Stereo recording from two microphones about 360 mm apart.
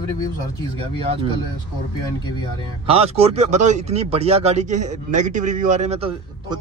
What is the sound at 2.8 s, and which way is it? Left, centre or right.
Speech, centre.